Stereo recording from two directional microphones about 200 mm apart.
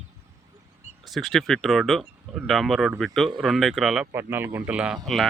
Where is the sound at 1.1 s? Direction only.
Centre (ahead or behind).